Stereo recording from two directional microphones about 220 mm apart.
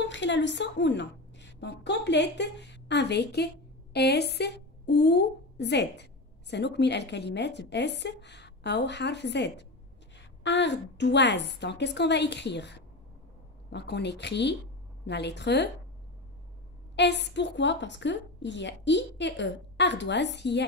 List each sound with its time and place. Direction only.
0.0 s a woman's voice: 55° left (ahead or behind)
16.9 s a woman's voice: 50° left (ahead or behind)